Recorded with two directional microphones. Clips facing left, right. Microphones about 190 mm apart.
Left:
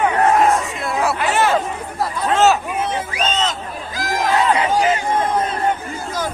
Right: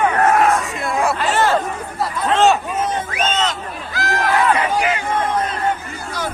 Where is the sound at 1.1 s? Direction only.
15° left (ahead or behind).